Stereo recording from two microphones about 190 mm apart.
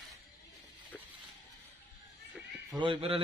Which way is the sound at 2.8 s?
30° right (ahead or behind).